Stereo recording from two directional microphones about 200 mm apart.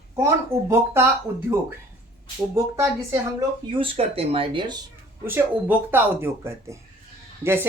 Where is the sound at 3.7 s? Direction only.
25° right (ahead or behind).